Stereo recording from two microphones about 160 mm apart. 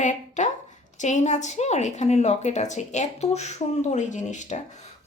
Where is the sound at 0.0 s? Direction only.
50° left (ahead or behind).